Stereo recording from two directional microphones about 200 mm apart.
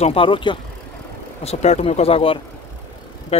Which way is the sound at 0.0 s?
25° left (ahead or behind).